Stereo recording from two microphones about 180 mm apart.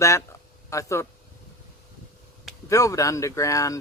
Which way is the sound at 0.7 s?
15° left (ahead or behind).